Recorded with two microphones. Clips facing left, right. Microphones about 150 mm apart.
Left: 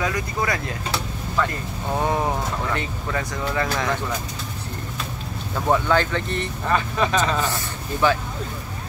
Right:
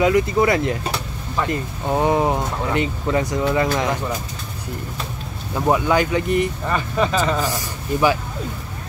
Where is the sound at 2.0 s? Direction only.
20° right (ahead or behind).